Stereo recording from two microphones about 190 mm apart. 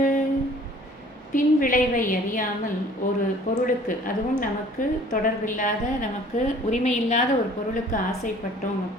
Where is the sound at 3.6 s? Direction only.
45° left (ahead or behind).